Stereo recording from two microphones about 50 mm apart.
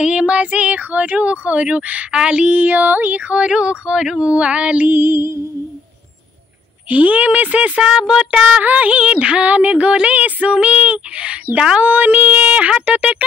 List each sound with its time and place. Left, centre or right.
0.0 s speech: centre
2.5 s female singing: right
3.3 s speech: centre
4.8 s music: right
6.9 s speech: right
11.8 s female singing: right
12.8 s speech: right